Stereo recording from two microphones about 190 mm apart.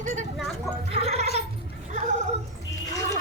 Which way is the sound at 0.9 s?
30° right (ahead or behind).